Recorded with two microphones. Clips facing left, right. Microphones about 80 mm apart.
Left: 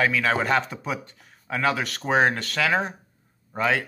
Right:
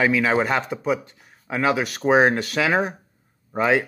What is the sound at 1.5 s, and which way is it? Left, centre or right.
Speech, centre.